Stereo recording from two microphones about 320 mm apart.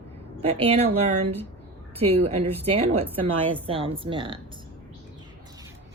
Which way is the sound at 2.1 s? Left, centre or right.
Centre.